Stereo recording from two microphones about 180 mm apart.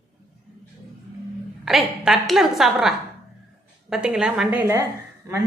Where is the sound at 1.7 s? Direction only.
Centre (ahead or behind).